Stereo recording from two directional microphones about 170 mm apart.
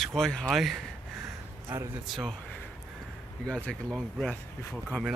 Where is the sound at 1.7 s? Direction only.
10° right (ahead or behind).